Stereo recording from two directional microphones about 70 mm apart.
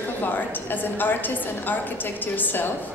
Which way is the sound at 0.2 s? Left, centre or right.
Left.